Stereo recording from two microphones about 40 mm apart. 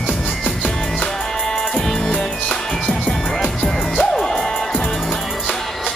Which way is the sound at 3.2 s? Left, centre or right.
Left.